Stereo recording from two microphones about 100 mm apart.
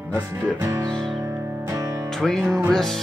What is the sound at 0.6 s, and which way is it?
Music, 30° right (ahead or behind).